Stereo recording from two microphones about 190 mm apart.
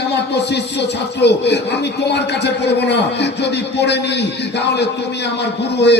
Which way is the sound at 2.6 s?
65° left (ahead or behind).